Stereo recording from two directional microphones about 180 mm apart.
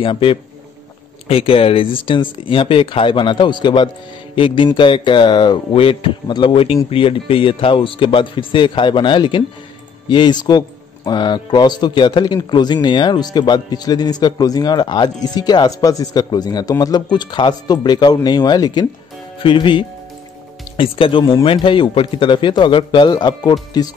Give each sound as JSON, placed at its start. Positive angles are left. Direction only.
{"t": 0.0, "sound": "speech", "side_deg": 30}